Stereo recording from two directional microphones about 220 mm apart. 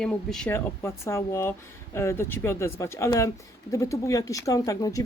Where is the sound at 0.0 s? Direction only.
Centre (ahead or behind).